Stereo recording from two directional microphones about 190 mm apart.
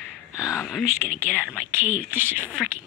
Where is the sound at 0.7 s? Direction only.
Centre (ahead or behind).